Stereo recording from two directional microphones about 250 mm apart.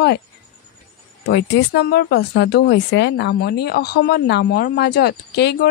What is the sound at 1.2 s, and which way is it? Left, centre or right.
A woman's voice, left.